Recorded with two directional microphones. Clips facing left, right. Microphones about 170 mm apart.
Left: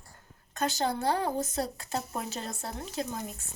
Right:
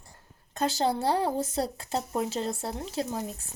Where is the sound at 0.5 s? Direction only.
30° right (ahead or behind).